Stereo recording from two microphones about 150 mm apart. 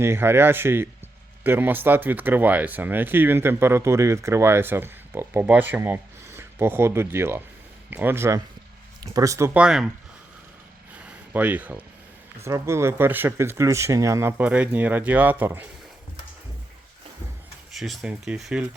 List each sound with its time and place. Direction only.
0.0 s speech: 15° right (ahead or behind)
9.6 s speech: 5° right (ahead or behind)
10.9 s a sound: 10° right (ahead or behind)
12.4 s speech: 20° right (ahead or behind)
17.7 s speech: centre (ahead or behind)